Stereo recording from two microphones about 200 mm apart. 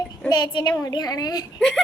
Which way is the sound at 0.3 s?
20° left (ahead or behind).